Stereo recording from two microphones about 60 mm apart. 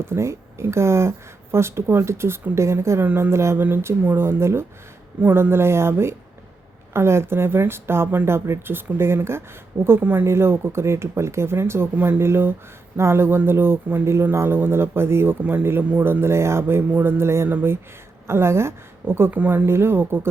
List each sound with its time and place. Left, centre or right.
0.0 s a man's voice: right
4.3 s speech: right
10.0 s a man's voice: right
10.2 s a man's voice: right
15.4 s speech: right
16.2 s a man's voice: right
19.3 s speech: right
19.6 s speech: right